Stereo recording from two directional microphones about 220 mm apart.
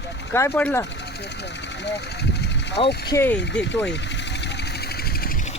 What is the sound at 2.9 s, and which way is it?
Speech, 45° left (ahead or behind).